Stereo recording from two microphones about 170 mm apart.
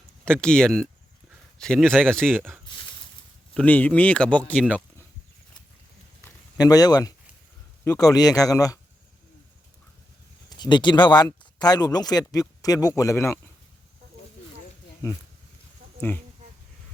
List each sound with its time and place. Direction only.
0.3 s speech: 5° left (ahead or behind)
3.5 s speech: 10° left (ahead or behind)
6.6 s speech: 20° left (ahead or behind)
10.6 s speech: 25° left (ahead or behind)
16.0 s speech: 10° left (ahead or behind)